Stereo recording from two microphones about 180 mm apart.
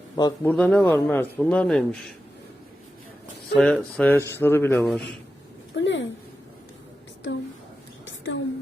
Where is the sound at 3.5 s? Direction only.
5° left (ahead or behind).